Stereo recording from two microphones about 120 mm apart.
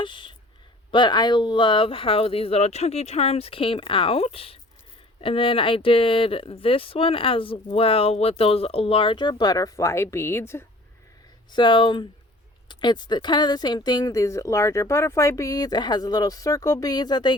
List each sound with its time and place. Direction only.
0.0 s speech: 45° left (ahead or behind); by 10.7 s 20° left (ahead or behind)
11.5 s speech: 40° left (ahead or behind)